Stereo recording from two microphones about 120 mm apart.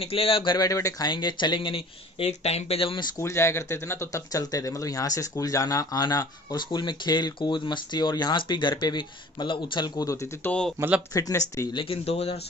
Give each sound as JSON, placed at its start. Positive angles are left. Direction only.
{"t": 0.0, "sound": "speech", "side_deg": 55}
{"t": 3.2, "sound": "speech", "side_deg": 25}
{"t": 11.7, "sound": "speech", "side_deg": 50}